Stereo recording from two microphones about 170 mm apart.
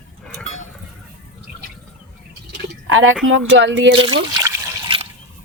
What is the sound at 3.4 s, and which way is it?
Speech, 90° right.